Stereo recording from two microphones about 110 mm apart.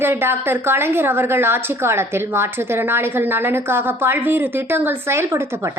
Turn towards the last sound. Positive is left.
turn(degrees=-25)  # may be behind; listen again after turning